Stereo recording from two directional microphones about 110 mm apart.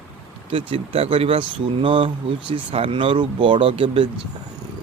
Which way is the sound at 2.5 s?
60° right (ahead or behind).